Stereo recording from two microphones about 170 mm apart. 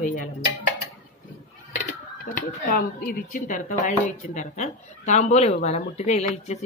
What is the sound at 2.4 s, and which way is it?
Speech, 60° left (ahead or behind).